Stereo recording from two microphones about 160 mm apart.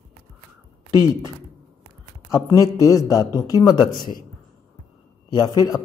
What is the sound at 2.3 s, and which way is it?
Speech, 15° left (ahead or behind).